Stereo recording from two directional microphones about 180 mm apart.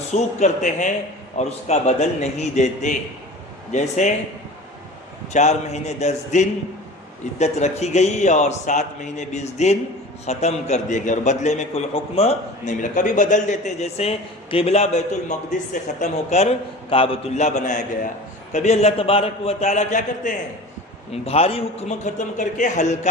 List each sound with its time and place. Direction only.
0.1 s a man's voice: 40° left (ahead or behind)
5.3 s a man's voice: 40° left (ahead or behind)
21.1 s a man's voice: 35° left (ahead or behind)